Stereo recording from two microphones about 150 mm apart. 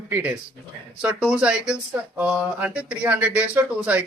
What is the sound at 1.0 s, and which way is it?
Speech, 5° right (ahead or behind).